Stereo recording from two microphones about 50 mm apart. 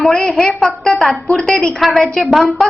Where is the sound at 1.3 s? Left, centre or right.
Centre.